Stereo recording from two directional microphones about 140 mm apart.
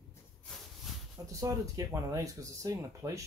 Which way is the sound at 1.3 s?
25° right (ahead or behind).